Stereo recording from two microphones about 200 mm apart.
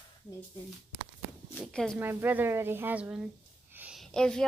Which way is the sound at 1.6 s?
5° left (ahead or behind).